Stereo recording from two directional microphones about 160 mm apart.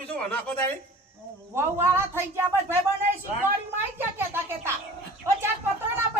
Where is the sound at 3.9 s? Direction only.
15° right (ahead or behind).